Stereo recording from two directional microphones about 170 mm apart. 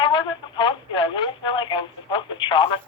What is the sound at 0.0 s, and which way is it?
Telephone, 30° left (ahead or behind).